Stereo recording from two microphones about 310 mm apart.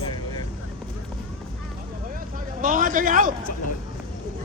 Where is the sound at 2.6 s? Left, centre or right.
Right.